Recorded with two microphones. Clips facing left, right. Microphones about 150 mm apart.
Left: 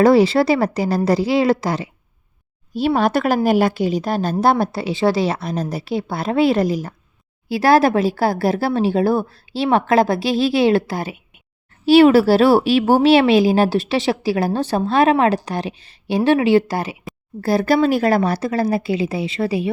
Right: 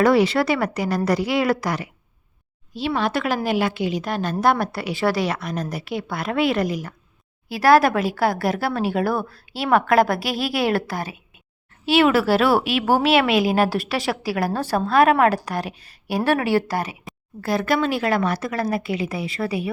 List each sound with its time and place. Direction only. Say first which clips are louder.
0.0 s a woman's voice: left 4 dB; 30° left (ahead or behind)
2.7 s a woman's voice: left 6 dB; 45° left (ahead or behind); by 19.7 s 30° left (ahead or behind)